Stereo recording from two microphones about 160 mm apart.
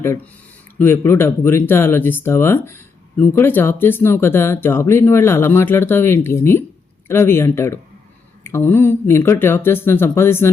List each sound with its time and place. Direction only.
0.8 s speech: 15° left (ahead or behind)